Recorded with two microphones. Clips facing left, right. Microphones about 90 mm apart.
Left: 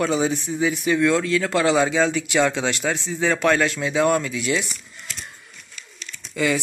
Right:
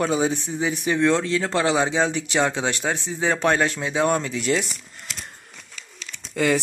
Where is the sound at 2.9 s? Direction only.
20° right (ahead or behind).